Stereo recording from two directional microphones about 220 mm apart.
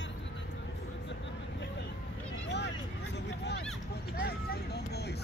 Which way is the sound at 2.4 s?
50° left (ahead or behind).